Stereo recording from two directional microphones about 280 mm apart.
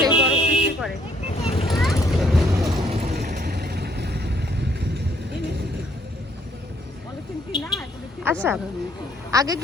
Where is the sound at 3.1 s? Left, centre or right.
Right.